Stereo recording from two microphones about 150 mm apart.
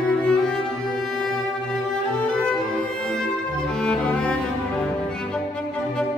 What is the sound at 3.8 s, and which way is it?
Music, 5° left (ahead or behind).